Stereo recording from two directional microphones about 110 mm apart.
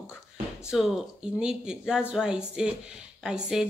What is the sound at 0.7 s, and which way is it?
Speech, 5° right (ahead or behind).